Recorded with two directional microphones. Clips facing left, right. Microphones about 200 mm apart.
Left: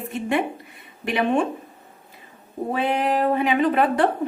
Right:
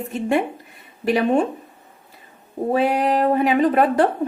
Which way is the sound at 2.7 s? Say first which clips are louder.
Right 3 dB; 40° right (ahead or behind).